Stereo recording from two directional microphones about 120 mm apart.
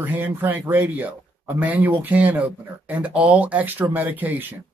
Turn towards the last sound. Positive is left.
turn(degrees=-15)  # may be behind; listen again after turning